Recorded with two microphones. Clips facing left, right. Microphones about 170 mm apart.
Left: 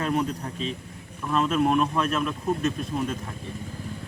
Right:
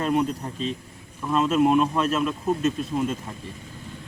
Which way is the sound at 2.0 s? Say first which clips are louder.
Right 2 dB; 25° right (ahead or behind).